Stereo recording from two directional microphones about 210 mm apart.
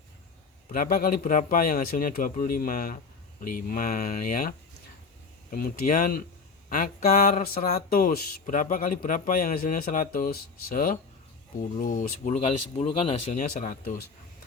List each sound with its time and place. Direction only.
0.7 s speech: 45° left (ahead or behind); by 13.4 s 25° left (ahead or behind)
13.4 s speech: 40° left (ahead or behind)